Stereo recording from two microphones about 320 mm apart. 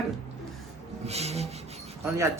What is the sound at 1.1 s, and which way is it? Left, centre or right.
Rub, centre.